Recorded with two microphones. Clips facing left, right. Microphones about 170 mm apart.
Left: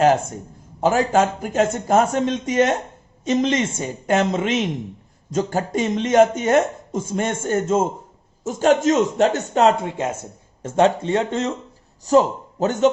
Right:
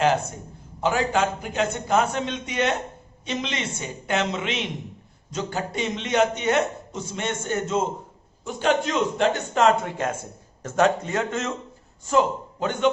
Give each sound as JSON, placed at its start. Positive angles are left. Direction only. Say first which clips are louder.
{"t": 0.8, "sound": "speech", "louder": "left 5 dB", "side_deg": 40}
{"t": 9.8, "sound": "a man's voice", "louder": "left 3 dB", "side_deg": 20}